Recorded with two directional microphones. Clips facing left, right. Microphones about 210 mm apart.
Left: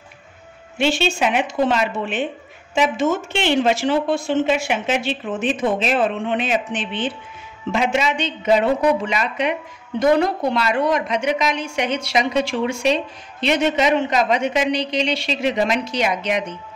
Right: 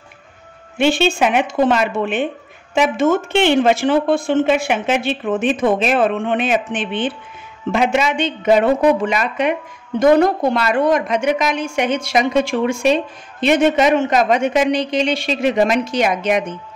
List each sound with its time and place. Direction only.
0.7 s a woman's voice: 55° right (ahead or behind)